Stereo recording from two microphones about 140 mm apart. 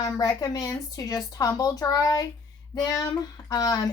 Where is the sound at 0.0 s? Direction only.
25° left (ahead or behind).